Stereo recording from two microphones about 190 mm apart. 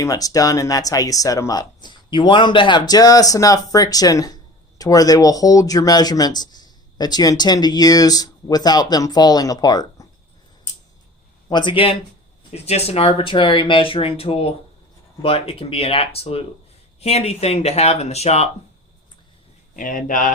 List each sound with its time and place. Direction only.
0.0 s speech: 20° left (ahead or behind)
11.4 s speech: 25° left (ahead or behind)
19.7 s speech: 45° left (ahead or behind)